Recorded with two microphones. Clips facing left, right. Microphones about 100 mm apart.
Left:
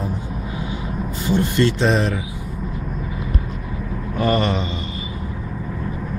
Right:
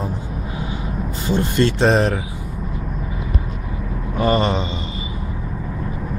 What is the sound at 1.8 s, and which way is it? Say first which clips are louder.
Speech: right 3 dB; 45° right (ahead or behind).